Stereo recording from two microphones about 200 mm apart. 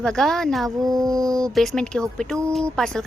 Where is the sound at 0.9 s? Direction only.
15° right (ahead or behind).